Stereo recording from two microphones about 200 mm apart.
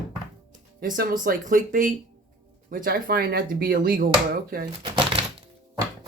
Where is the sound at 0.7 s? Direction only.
45° right (ahead or behind).